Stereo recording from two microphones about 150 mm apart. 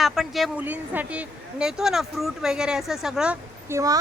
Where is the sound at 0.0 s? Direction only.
Centre (ahead or behind).